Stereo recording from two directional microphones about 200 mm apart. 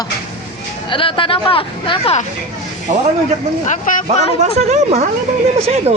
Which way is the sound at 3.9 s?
40° left (ahead or behind).